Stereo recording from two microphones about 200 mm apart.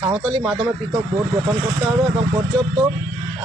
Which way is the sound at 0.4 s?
5° right (ahead or behind).